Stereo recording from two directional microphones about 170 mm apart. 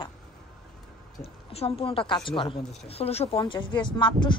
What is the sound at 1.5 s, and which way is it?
A woman's voice, 35° left (ahead or behind).